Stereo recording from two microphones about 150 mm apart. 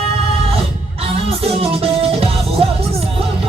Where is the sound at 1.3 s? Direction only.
40° right (ahead or behind).